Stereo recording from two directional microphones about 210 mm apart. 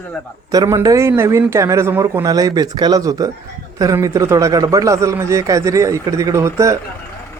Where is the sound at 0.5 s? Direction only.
15° right (ahead or behind).